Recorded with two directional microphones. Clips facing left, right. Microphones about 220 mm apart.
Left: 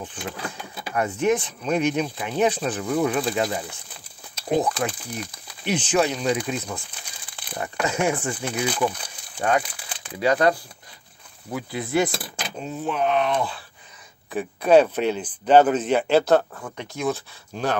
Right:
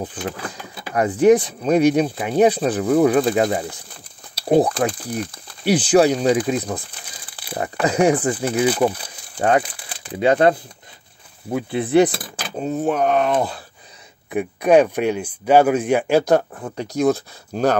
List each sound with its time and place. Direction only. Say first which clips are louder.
0.9 s speech: right 8 dB; 35° right (ahead or behind)
4.4 s speech: right 6 dB; 35° right (ahead or behind)
12.5 s speech: right 7 dB; 45° right (ahead or behind)
14.3 s speech: right 2 dB; 15° right (ahead or behind)
16.5 s speech: right 9 dB; 35° right (ahead or behind)